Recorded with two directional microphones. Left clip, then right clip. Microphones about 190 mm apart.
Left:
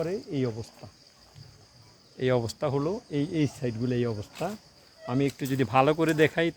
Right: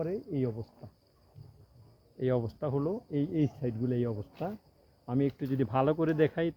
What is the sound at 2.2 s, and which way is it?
Speech, 25° left (ahead or behind).